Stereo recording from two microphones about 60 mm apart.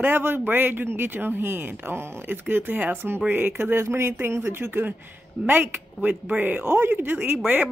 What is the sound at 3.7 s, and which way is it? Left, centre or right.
Speech, right.